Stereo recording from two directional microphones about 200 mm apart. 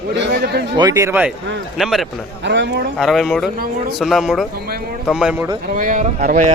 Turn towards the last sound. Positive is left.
turn(degrees=-40)  # may be behind; listen again after turning